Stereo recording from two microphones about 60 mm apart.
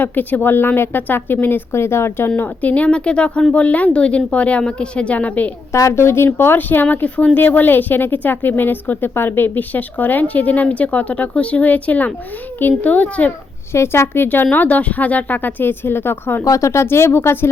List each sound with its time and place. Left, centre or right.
0.0 s speech: left
2.3 s a woman's voice: left
5.7 s a woman's voice: left
13.7 s speech: left
16.4 s speech: left